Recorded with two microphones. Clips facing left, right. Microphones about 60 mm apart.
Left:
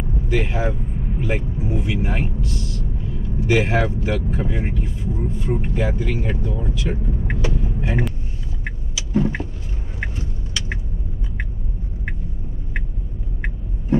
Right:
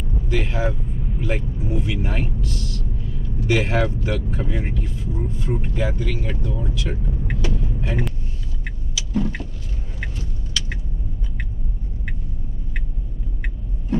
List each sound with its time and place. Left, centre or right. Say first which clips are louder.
0.3 s speech: left 1 dB; centre
8.9 s vehicle: left 3 dB; left